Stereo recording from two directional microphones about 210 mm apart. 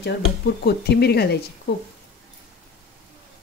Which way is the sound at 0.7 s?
50° left (ahead or behind).